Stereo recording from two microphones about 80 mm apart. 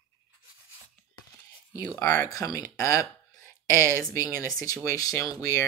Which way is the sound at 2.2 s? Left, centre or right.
Left.